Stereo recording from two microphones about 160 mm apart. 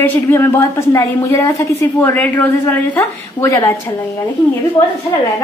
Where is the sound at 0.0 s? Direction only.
15° left (ahead or behind).